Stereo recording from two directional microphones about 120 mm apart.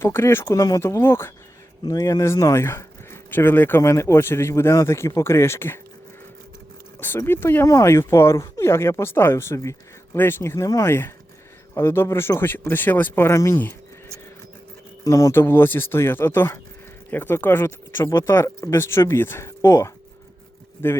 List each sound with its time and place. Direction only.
0.0 s speech: 20° left (ahead or behind)
1.8 s speech: 30° left (ahead or behind)
7.0 s speech: 20° left (ahead or behind)
15.0 s speech: 25° left (ahead or behind)